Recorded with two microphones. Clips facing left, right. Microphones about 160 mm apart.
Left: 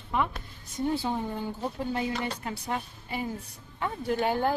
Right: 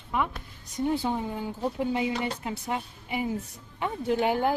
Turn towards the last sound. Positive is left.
turn(degrees=-15)  # may be behind; listen again after turning